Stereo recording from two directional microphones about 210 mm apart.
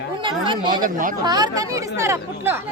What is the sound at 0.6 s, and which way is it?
Speech, 40° right (ahead or behind).